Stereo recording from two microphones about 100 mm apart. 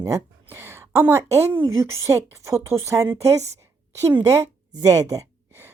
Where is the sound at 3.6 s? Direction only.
25° right (ahead or behind).